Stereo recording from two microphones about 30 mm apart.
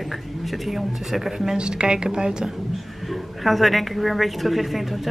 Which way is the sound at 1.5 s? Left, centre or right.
Right.